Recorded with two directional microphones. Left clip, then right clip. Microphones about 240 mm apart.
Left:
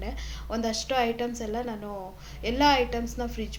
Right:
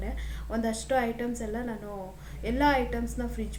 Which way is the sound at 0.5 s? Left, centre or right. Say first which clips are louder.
Left 1 dB; left.